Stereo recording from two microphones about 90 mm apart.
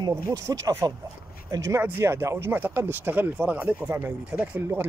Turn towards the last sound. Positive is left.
turn(degrees=-20)  # may be behind; listen again after turning